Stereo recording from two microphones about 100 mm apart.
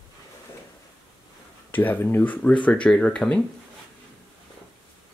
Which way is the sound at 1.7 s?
20° left (ahead or behind).